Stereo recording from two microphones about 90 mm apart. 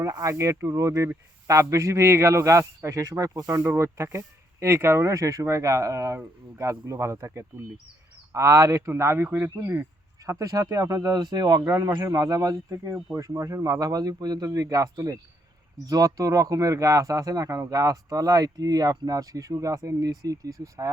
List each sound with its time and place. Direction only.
0.0 s speech: 35° right (ahead or behind)
10.2 s speech: 35° right (ahead or behind)